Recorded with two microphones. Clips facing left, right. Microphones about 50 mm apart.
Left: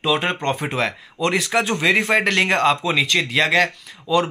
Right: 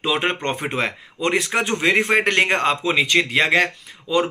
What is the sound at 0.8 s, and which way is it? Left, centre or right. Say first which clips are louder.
Speech: left 1 dB; centre.